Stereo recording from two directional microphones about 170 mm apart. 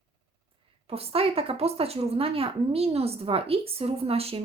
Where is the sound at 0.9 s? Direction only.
35° right (ahead or behind).